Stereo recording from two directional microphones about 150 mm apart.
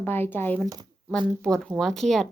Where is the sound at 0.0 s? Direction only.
15° left (ahead or behind).